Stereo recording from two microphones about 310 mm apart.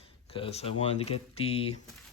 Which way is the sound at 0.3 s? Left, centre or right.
Centre.